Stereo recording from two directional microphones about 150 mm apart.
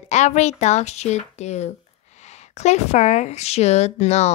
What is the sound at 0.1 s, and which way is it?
Speech, 50° left (ahead or behind).